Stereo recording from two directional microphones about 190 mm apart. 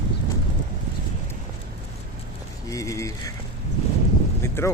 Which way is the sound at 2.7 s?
15° left (ahead or behind).